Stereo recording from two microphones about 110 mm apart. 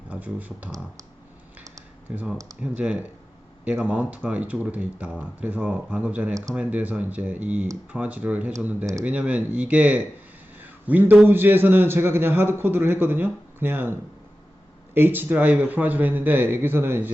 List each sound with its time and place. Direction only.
0.1 s speech: 15° right (ahead or behind)
2.1 s a man's voice: 10° right (ahead or behind)
10.6 s a sound: 15° right (ahead or behind)
11.3 s a man's voice: 20° right (ahead or behind)
14.9 s a man's voice: 20° right (ahead or behind)